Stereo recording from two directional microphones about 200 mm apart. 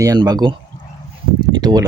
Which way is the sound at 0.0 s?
20° right (ahead or behind).